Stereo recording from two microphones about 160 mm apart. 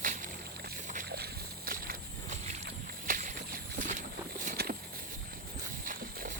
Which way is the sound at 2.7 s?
65° right (ahead or behind).